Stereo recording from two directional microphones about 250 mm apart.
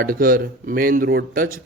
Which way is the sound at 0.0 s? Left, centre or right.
Right.